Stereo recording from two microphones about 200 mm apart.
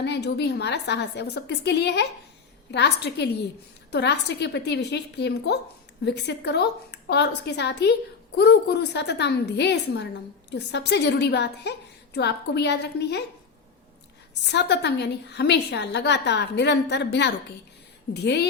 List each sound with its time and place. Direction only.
0.0 s a woman's voice: 55° left (ahead or behind)
14.4 s a woman's voice: 60° left (ahead or behind)